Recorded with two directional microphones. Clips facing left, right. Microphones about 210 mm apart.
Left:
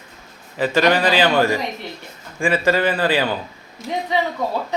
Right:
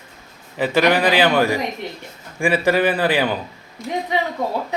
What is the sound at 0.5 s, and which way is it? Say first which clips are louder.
A man's voice: even; 15° right (ahead or behind).